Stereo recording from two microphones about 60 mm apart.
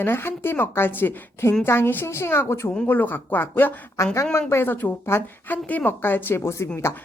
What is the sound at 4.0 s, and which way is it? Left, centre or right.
Speech, left.